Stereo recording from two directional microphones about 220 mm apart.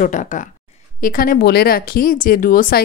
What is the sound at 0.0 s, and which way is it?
Speech, 35° left (ahead or behind).